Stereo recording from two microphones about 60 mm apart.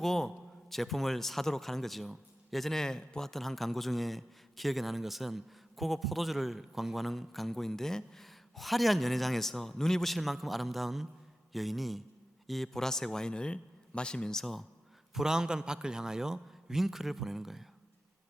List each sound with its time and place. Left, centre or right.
0.0 s a man's voice: centre
15.1 s a man's voice: centre